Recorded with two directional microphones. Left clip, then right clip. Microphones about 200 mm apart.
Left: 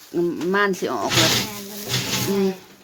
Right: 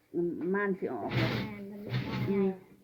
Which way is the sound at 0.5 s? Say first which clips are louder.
Left 14 dB; 40° left (ahead or behind).